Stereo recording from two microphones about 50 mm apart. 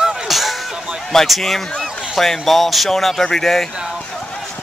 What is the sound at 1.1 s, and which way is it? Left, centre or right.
A man's voice, centre.